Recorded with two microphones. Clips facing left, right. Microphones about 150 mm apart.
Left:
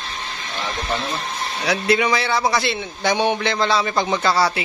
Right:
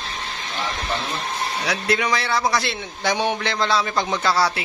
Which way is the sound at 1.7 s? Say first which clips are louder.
Left 5 dB; centre (ahead or behind).